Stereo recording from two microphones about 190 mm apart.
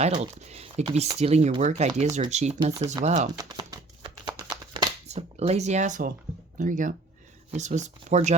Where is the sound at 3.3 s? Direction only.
20° right (ahead or behind).